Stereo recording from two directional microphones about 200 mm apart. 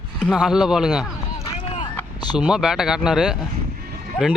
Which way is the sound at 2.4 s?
5° right (ahead or behind).